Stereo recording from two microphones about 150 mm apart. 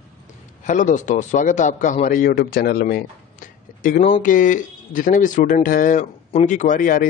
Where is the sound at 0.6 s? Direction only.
55° left (ahead or behind).